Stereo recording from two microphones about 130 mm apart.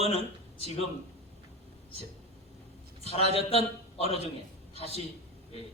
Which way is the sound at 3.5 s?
50° left (ahead or behind).